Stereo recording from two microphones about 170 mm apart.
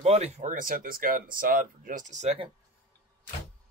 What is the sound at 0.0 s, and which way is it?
Speech, 40° right (ahead or behind).